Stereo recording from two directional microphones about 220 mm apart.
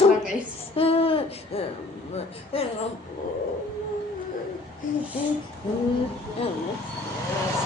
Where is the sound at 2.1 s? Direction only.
25° left (ahead or behind).